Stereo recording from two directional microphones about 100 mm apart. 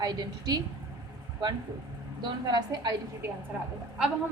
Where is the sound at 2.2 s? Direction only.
45° right (ahead or behind).